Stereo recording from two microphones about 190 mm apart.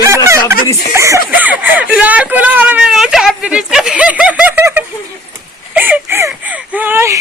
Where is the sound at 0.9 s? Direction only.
15° right (ahead or behind).